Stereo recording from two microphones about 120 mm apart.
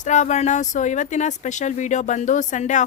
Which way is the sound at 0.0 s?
90° left.